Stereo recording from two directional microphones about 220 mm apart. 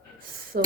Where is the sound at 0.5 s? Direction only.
45° right (ahead or behind).